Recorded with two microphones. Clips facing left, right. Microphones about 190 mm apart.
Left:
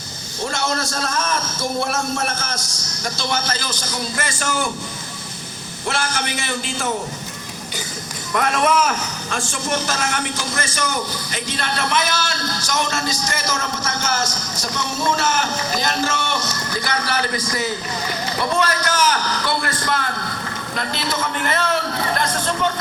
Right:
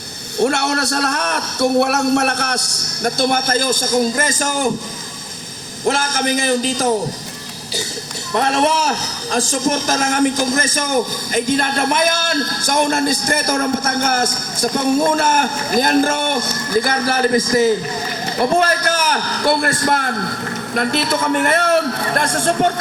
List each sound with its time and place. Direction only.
0.3 s a man's voice: 65° right (ahead or behind); by 4.7 s 40° right (ahead or behind)
5.8 s a man's voice: 40° right (ahead or behind)
8.3 s a man's voice: 35° right (ahead or behind); by 22.3 s 55° right (ahead or behind)